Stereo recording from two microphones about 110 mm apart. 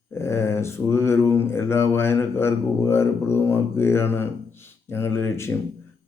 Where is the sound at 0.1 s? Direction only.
25° left (ahead or behind).